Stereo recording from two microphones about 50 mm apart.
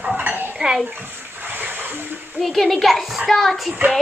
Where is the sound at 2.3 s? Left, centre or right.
Centre.